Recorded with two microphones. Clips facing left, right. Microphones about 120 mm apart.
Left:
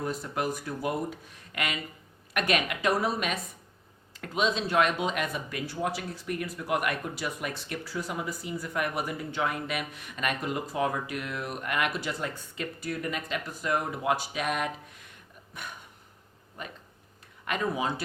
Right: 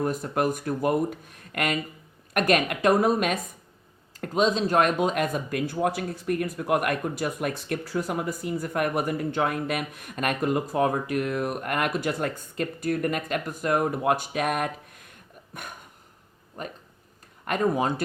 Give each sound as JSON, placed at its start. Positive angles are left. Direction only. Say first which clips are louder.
{"t": 0.0, "sound": "speech", "louder": "right 6 dB", "side_deg": -50}